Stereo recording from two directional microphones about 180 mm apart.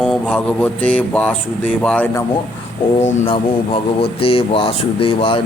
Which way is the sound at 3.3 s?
30° left (ahead or behind).